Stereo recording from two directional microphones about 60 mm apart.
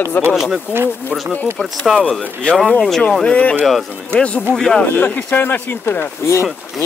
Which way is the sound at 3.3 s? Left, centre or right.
Centre.